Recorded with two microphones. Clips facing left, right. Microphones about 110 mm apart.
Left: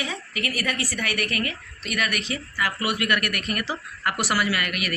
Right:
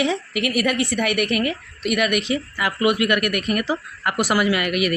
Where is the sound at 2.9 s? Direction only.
40° left (ahead or behind).